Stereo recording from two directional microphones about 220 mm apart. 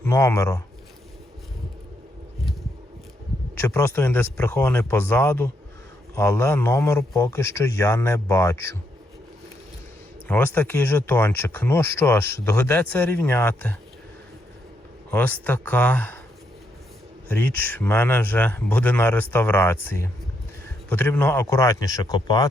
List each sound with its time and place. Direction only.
0.0 s speech: 15° left (ahead or behind)
3.6 s speech: 10° left (ahead or behind)
10.2 s speech: 10° left (ahead or behind)
15.1 s speech: 10° left (ahead or behind)
17.2 s speech: 10° left (ahead or behind)